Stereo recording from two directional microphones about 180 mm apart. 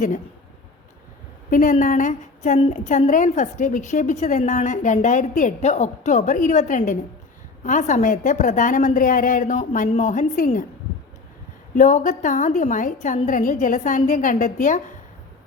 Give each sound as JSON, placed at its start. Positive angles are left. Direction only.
{"t": 1.5, "sound": "a woman's voice", "side_deg": 50}
{"t": 11.8, "sound": "a woman's voice", "side_deg": 45}